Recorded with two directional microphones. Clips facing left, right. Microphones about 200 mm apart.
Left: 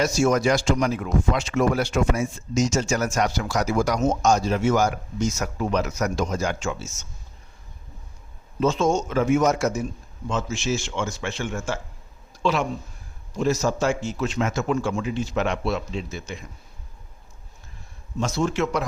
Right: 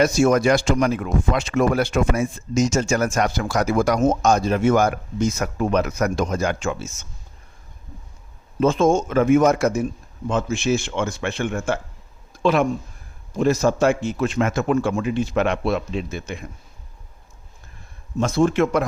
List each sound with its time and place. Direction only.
0.0 s speech: 60° right (ahead or behind)
8.6 s speech: 55° right (ahead or behind)
12.3 s a sound: 55° right (ahead or behind)
13.3 s speech: 55° right (ahead or behind)
18.2 s a man's voice: 55° right (ahead or behind)